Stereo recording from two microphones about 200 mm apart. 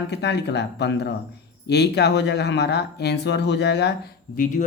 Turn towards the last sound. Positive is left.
turn(degrees=40)  # may be behind; listen again after turning